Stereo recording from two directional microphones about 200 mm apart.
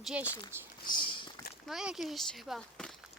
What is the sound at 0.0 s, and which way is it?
Speech, 5° right (ahead or behind).